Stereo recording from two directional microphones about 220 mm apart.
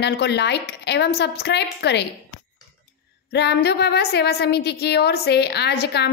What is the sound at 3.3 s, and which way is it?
A woman's voice, 50° left (ahead or behind).